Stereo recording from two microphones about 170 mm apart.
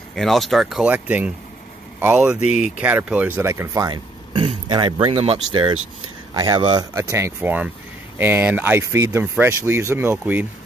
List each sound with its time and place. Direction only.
0.1 s speech: centre (ahead or behind)